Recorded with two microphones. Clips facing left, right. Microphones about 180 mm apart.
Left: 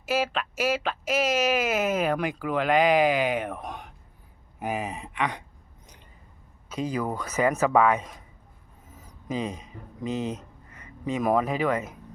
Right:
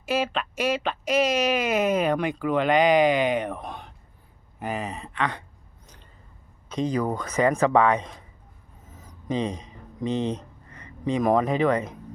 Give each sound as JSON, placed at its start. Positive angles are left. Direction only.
{"t": 0.0, "sound": "speech", "side_deg": 5}
{"t": 6.7, "sound": "speech", "side_deg": 5}
{"t": 9.0, "sound": "a sound", "side_deg": 5}
{"t": 9.5, "sound": "speech", "side_deg": -35}
{"t": 10.0, "sound": "speech", "side_deg": 5}